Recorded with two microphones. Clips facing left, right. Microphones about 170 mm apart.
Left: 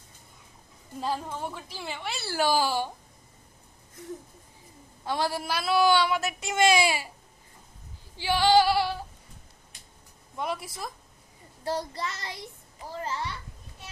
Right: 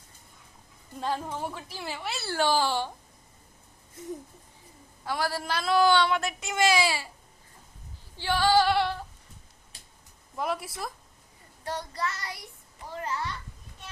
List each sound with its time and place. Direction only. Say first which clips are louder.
0.9 s a woman's voice: even; 5° left (ahead or behind)
2.4 s a woman's voice: left 1 dB; 10° left (ahead or behind)
5.0 s a woman's voice: left 1 dB; 25° left (ahead or behind); by 6.5 s 10° left (ahead or behind)
6.5 s a child's voice: left 2 dB; 20° left (ahead or behind)
8.1 s a woman's voice: left 2 dB; 10° left (ahead or behind)
8.7 s a sound: even; 5° left (ahead or behind)
9.7 s a sound: right 3 dB; 30° right (ahead or behind)
10.3 s a woman's voice: right 1 dB; centre (ahead or behind)
11.6 s a child's voice: left 4 dB; 30° left (ahead or behind)
12.0 s a child's voice: right 2 dB; 20° left (ahead or behind)